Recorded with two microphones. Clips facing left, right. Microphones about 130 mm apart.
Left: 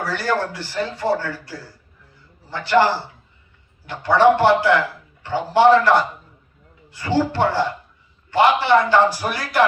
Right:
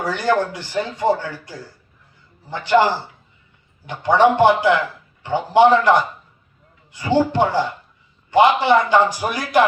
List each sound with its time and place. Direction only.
0.0 s speech: 15° right (ahead or behind)
6.9 s speech: 15° right (ahead or behind)